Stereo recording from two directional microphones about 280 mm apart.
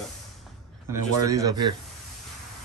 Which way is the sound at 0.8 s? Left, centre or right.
Centre.